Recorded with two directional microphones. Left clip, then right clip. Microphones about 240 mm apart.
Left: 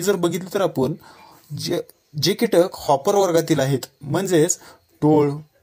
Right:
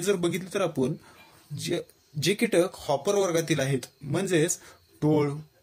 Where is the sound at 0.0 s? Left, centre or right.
Left.